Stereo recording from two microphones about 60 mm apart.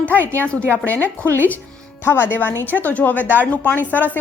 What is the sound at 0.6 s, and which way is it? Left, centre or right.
Speech, right.